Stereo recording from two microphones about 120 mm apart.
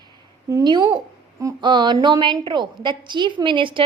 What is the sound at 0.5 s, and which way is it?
A woman's voice, 40° right (ahead or behind).